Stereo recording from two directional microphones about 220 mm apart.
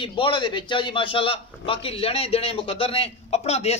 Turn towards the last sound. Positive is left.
turn(degrees=30)  # may be behind; listen again after turning